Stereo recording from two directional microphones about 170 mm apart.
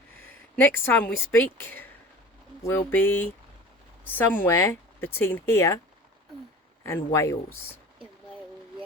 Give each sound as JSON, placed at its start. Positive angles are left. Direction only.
{"t": 0.3, "sound": "speech", "side_deg": 10}
{"t": 6.8, "sound": "speech", "side_deg": 15}